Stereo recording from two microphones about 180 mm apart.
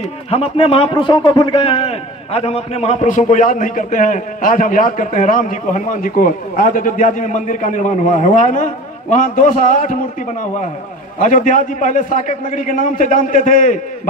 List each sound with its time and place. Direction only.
0.3 s a man's voice: 35° left (ahead or behind)
11.1 s a man's voice: 45° left (ahead or behind)